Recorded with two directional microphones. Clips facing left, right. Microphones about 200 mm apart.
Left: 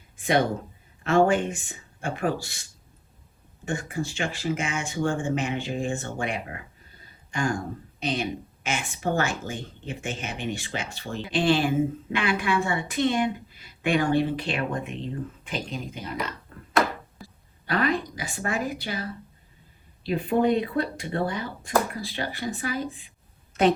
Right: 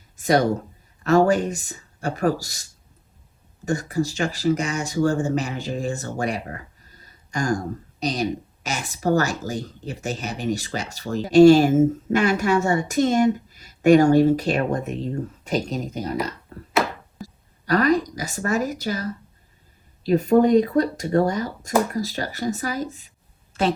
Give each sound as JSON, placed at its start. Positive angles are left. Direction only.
{"t": 0.2, "sound": "speech", "side_deg": -40}
{"t": 3.7, "sound": "speech", "side_deg": -40}
{"t": 17.2, "sound": "a woman's voice", "side_deg": -40}